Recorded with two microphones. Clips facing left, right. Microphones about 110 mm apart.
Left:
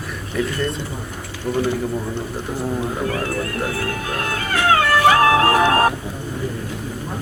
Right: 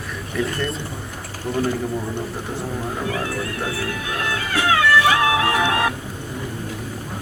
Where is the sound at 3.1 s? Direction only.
45° left (ahead or behind).